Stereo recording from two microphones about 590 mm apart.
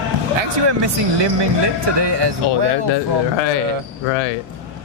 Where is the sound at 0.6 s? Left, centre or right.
Right.